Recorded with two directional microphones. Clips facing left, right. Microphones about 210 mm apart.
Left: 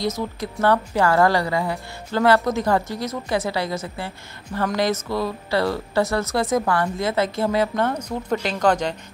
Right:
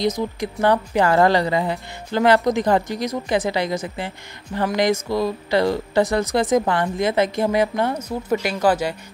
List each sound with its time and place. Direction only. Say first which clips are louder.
0.0 s speech: right 3 dB; 15° right (ahead or behind)